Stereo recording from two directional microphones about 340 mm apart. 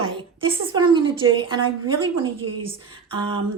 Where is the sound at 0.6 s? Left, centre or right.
Centre.